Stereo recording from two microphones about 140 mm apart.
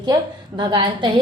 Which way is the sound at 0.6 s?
35° right (ahead or behind).